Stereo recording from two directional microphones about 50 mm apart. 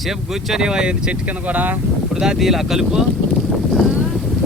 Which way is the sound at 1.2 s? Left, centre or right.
Right.